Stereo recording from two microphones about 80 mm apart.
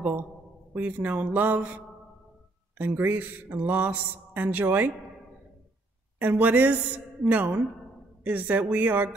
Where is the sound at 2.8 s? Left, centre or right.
Right.